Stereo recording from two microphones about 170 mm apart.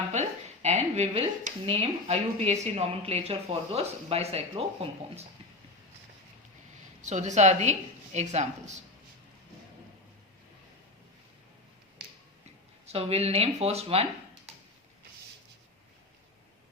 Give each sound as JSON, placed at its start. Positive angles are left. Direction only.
{"t": 0.1, "sound": "speech", "side_deg": -40}
{"t": 7.0, "sound": "a woman's voice", "side_deg": -45}
{"t": 12.8, "sound": "speech", "side_deg": -40}